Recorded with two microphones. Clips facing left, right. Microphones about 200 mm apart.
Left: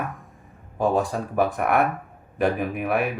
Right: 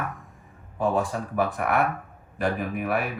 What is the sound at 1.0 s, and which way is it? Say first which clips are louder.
Speech: left 3 dB; 45° left (ahead or behind).